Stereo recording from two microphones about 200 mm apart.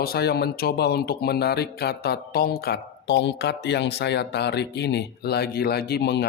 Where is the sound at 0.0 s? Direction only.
50° left (ahead or behind).